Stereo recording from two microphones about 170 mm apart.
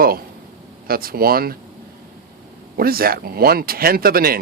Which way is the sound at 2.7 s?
60° right (ahead or behind).